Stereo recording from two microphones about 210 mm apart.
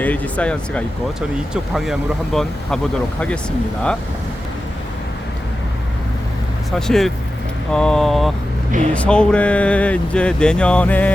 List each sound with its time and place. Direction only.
0.0 s speech: 5° left (ahead or behind)
6.7 s speech: centre (ahead or behind)